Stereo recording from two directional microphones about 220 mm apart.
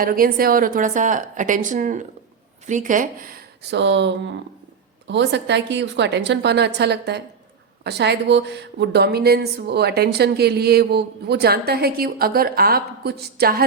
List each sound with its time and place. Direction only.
0.0 s a woman's voice: 40° right (ahead or behind)